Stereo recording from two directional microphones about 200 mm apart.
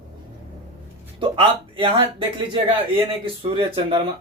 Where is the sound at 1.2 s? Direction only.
25° right (ahead or behind).